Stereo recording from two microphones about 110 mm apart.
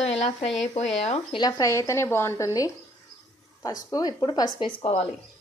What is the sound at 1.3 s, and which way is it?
A woman's voice, 40° left (ahead or behind).